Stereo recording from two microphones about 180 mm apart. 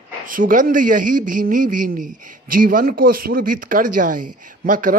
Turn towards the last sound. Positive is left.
turn(degrees=-45)  # may be behind; listen again after turning